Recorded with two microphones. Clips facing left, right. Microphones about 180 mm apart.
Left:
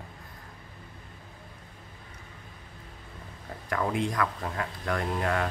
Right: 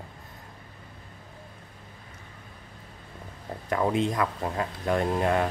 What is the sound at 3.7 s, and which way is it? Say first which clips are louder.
Speech: right 4 dB; 25° right (ahead or behind).